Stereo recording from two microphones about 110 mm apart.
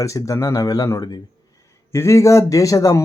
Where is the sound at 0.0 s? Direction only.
30° left (ahead or behind).